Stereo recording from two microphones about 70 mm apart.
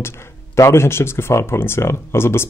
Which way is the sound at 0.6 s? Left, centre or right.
Left.